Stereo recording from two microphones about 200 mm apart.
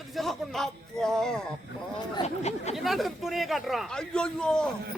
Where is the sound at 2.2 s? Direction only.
35° left (ahead or behind).